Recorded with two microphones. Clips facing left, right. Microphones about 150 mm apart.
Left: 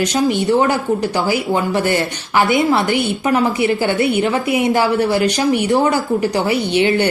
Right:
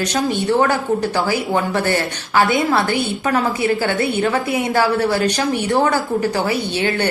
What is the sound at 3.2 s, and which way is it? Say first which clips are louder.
A woman's voice: left 2 dB; 25° left (ahead or behind).